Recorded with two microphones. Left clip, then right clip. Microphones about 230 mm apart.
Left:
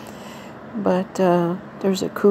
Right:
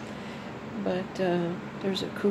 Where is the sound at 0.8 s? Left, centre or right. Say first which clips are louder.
Left 10 dB; left.